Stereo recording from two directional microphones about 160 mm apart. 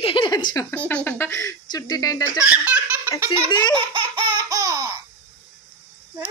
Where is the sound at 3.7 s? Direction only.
30° right (ahead or behind).